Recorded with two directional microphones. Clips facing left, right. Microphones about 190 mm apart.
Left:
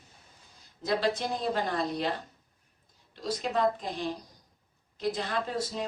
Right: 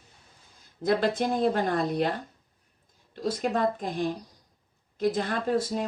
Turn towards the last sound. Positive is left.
turn(degrees=-50)  # may be behind; listen again after turning